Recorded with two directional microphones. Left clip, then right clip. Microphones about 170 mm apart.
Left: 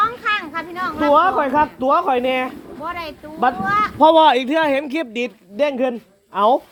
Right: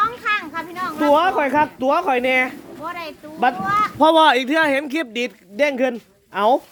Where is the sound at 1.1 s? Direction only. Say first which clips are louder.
Left 2 dB; 20° right (ahead or behind).